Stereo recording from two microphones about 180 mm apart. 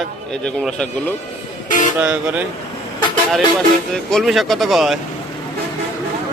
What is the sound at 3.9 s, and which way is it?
A man's voice, centre (ahead or behind).